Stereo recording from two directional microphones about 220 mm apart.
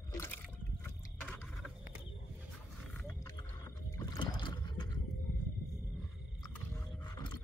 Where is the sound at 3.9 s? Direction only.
20° left (ahead or behind).